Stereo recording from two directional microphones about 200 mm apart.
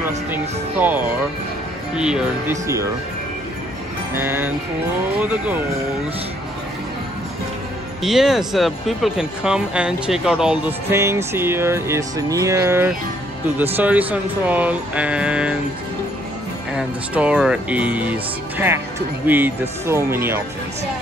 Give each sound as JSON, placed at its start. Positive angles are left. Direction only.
{"t": 0.3, "sound": "speech", "side_deg": -10}
{"t": 2.6, "sound": "speech", "side_deg": -15}
{"t": 4.1, "sound": "speech", "side_deg": -10}
{"t": 8.0, "sound": "speech", "side_deg": 0}
{"t": 16.7, "sound": "speech", "side_deg": -5}